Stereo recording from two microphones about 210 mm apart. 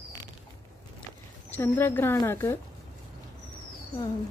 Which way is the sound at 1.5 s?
10° left (ahead or behind).